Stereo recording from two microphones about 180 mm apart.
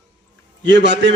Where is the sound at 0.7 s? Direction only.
80° right.